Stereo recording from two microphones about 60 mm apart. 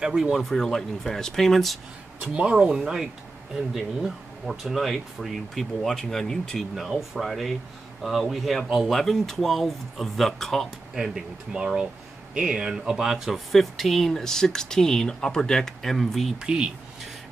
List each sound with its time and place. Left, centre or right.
0.0 s speech: centre
2.1 s speech: centre
2.8 s speech: centre
6.7 s speech: centre
11.0 s speech: centre
16.3 s speech: centre